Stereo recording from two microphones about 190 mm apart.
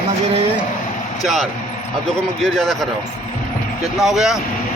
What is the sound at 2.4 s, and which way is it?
Speech, centre (ahead or behind).